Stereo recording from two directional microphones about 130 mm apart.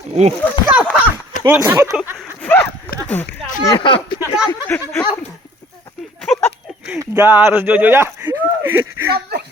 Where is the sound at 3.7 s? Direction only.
40° left (ahead or behind).